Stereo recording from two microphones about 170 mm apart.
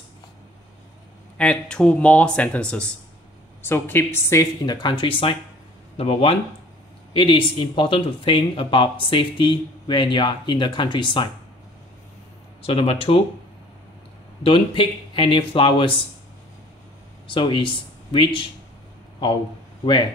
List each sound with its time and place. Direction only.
1.4 s speech: 5° left (ahead or behind); by 11.2 s 30° left (ahead or behind)
12.6 s speech: 35° left (ahead or behind)
14.4 s speech: 30° left (ahead or behind)
17.3 s speech: 30° left (ahead or behind)
19.8 s speech: 25° left (ahead or behind)